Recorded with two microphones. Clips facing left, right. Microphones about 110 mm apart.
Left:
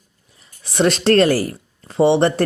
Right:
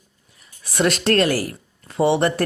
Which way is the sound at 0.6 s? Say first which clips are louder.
Left 3 dB; 25° left (ahead or behind).